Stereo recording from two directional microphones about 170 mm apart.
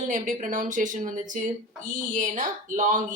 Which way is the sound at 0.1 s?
50° right (ahead or behind).